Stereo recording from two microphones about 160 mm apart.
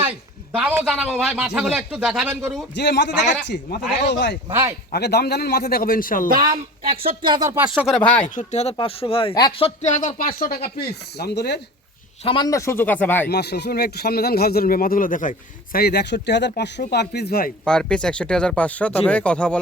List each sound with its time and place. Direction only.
0.5 s a man's voice: 10° right (ahead or behind)
2.7 s a man's voice: 90° left; by 6.2 s 60° left (ahead or behind)
6.9 s speech: 35° right (ahead or behind)
8.4 s speech: 45° left (ahead or behind)
8.7 s speech: 35° left (ahead or behind)
9.6 s speech: 50° left (ahead or behind)
10.2 s a man's voice: 65° left (ahead or behind); by 11.6 s 90° left
12.2 s speech: 35° left (ahead or behind)
12.5 s speech: 20° left (ahead or behind)
13.2 s a man's voice: 90° left
17.7 s speech: 5° left (ahead or behind)